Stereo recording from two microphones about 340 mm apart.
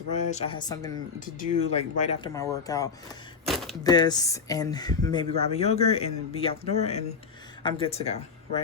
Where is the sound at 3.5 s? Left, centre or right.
Centre.